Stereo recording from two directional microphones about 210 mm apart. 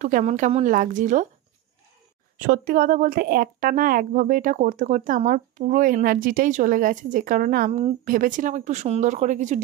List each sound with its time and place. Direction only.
0.0 s a woman's voice: 35° right (ahead or behind)
2.4 s a woman's voice: 45° right (ahead or behind)